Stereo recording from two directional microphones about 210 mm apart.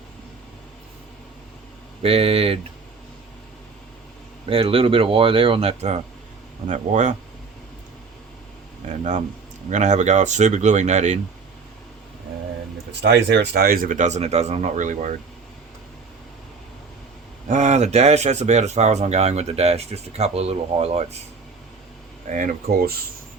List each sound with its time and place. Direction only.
2.0 s speech: 30° right (ahead or behind)
4.4 s speech: 25° right (ahead or behind)
8.8 s speech: 35° right (ahead or behind)
12.9 s speech: 55° right (ahead or behind); by 15.1 s 35° right (ahead or behind)
17.5 s speech: 35° right (ahead or behind)
22.3 s speech: 40° right (ahead or behind)